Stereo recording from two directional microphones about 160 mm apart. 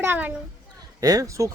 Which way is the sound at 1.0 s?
20° right (ahead or behind).